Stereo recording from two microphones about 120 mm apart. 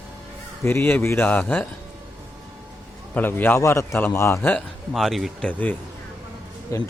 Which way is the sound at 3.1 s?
15° left (ahead or behind).